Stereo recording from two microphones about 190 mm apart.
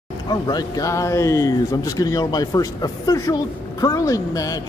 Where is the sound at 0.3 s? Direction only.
20° left (ahead or behind).